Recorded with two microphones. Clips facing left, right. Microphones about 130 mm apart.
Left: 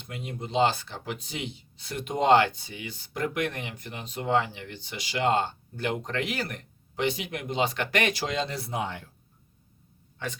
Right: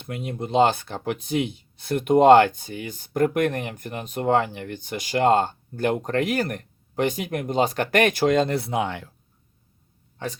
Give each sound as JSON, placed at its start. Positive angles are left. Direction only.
{"t": 0.0, "sound": "speech", "side_deg": -55}